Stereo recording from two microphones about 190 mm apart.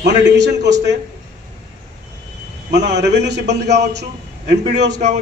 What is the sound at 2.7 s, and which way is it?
A man's voice, 60° right (ahead or behind).